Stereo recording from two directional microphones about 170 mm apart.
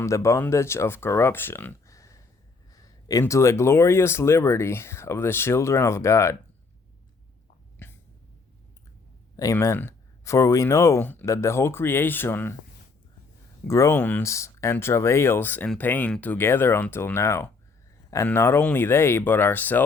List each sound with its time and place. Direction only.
0.0 s speech: 15° left (ahead or behind)
7.8 s a sound: 10° left (ahead or behind)
9.3 s speech: 20° left (ahead or behind)
13.7 s speech: 15° left (ahead or behind)